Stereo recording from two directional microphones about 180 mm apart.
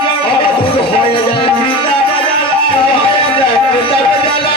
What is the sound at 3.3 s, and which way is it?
Music, 30° left (ahead or behind).